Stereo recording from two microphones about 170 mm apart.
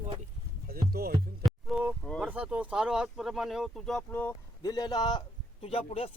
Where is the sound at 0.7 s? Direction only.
65° right (ahead or behind).